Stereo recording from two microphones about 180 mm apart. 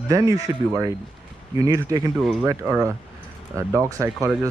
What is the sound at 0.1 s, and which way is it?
Speech, 20° right (ahead or behind).